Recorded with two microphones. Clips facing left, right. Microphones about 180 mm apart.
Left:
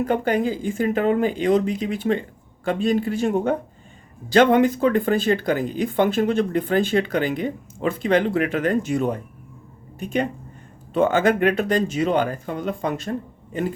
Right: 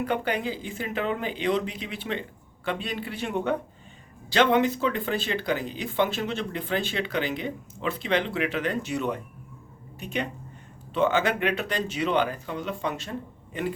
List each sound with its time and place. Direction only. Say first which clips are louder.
0.0 s speech: left 6 dB; 45° left (ahead or behind)